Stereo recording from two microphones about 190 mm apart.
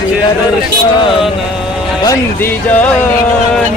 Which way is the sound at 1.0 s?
25° left (ahead or behind).